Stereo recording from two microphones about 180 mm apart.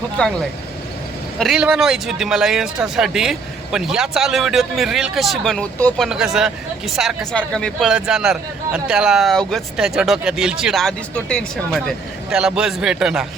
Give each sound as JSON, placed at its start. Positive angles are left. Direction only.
{"t": 0.2, "sound": "speech", "side_deg": 5}
{"t": 1.4, "sound": "speech", "side_deg": -5}